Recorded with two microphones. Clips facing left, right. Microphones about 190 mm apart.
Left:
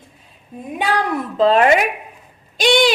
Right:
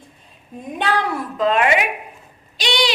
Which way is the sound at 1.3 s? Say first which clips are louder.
Left 5 dB; 35° left (ahead or behind).